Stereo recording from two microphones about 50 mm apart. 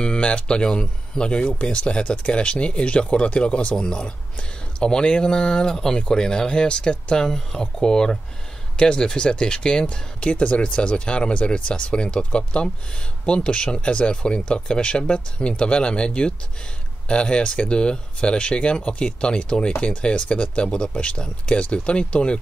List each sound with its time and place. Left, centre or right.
0.0 s speech: centre